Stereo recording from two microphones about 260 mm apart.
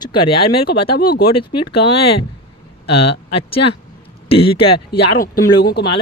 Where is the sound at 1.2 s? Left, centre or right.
Left.